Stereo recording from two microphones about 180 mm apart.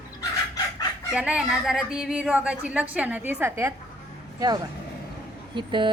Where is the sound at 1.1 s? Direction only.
5° right (ahead or behind).